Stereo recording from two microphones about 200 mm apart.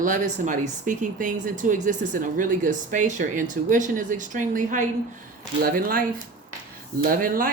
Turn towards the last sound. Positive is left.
turn(degrees=-45)  # may be behind; listen again after turning